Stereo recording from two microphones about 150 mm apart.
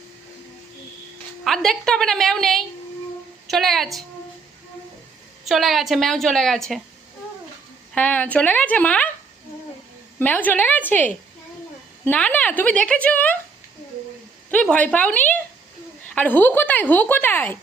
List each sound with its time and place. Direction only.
1.5 s a woman's voice: centre (ahead or behind)
5.5 s a woman's voice: centre (ahead or behind)
7.9 s a woman's voice: 10° left (ahead or behind)
10.2 s a woman's voice: 10° left (ahead or behind)
14.5 s a woman's voice: 5° left (ahead or behind)